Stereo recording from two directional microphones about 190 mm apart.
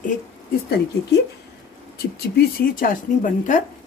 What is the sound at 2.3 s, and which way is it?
Speech, 45° left (ahead or behind).